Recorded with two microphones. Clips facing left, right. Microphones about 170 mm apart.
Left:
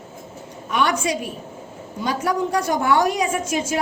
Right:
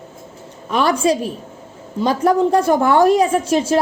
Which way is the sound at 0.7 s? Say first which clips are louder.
Right 5 dB; 30° right (ahead or behind).